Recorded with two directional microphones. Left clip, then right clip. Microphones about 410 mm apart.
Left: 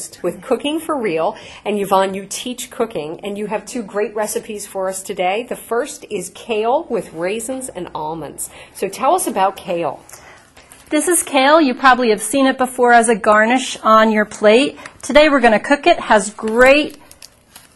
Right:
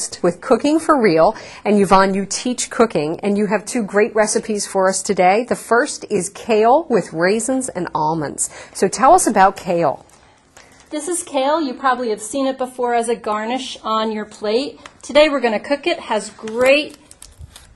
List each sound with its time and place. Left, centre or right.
0.2 s a woman's voice: right
10.9 s a woman's voice: left